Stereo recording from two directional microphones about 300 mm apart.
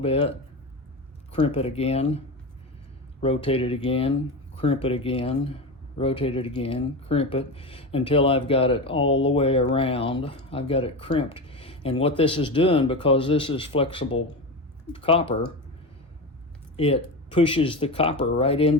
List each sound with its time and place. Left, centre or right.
0.0 s speech: centre
1.4 s speech: centre
16.7 s speech: centre